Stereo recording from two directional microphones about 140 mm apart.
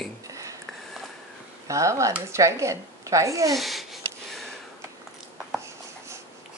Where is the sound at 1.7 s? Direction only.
20° right (ahead or behind).